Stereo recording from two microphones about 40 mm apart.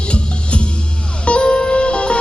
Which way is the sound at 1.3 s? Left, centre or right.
Left.